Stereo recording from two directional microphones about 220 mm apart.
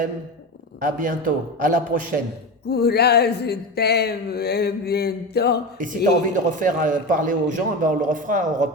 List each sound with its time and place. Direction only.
0.8 s a man's voice: 40° right (ahead or behind)
2.6 s a sound: 45° left (ahead or behind)
6.3 s a man's voice: 35° right (ahead or behind)